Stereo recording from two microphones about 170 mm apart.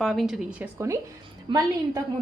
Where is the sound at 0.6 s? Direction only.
15° right (ahead or behind).